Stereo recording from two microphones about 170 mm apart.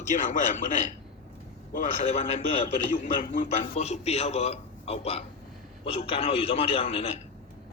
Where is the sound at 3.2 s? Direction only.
55° left (ahead or behind).